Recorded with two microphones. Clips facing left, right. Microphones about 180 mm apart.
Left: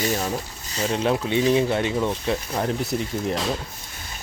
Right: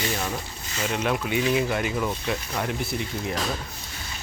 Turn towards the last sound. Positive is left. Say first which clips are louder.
# left 4 dB
turn(degrees=35)  # may be behind; listen again after turning